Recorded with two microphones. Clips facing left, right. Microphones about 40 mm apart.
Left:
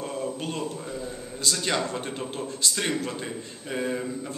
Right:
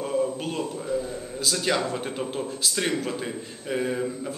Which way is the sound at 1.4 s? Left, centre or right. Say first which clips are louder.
Right 2 dB; centre.